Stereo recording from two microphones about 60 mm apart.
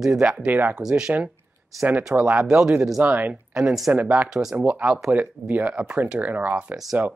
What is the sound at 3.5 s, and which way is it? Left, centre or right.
Speech, centre.